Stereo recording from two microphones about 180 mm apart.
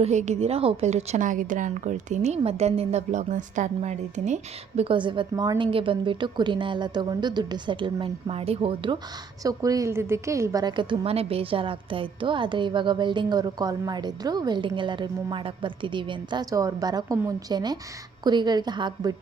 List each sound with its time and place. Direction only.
0.0 s a woman's voice: 40° right (ahead or behind)
4.8 s a woman's voice: 30° right (ahead or behind)